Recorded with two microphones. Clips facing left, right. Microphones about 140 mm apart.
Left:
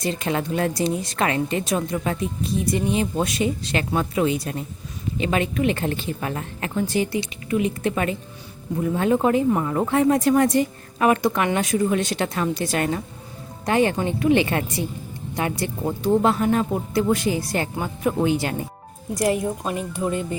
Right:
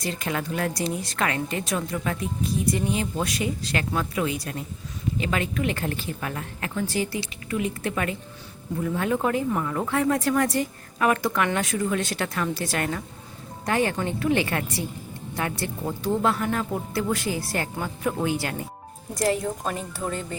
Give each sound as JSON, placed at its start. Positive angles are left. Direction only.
{"t": 0.0, "sound": "speech", "side_deg": 25}
{"t": 19.6, "sound": "speech", "side_deg": 10}